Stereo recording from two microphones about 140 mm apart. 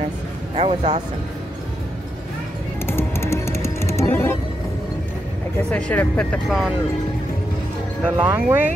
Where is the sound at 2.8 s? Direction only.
15° left (ahead or behind).